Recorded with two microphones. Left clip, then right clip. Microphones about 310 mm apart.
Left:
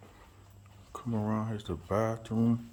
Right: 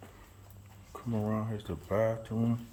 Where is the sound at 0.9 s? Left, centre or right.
Centre.